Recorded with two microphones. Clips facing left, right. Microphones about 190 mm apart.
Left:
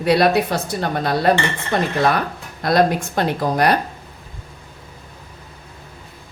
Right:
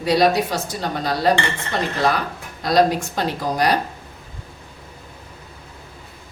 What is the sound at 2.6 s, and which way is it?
Speech, 55° left (ahead or behind).